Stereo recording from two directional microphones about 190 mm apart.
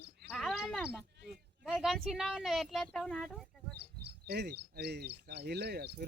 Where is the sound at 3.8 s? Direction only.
55° right (ahead or behind).